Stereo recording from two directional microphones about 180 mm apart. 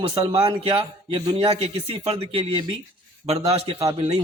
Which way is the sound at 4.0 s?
35° right (ahead or behind).